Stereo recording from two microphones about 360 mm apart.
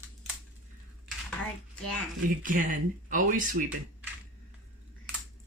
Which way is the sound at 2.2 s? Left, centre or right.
Right.